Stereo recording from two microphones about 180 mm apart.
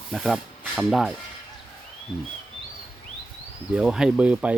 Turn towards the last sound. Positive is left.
turn(degrees=-5)  # may be behind; listen again after turning